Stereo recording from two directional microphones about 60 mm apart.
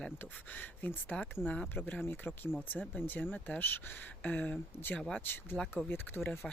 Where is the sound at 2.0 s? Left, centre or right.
Left.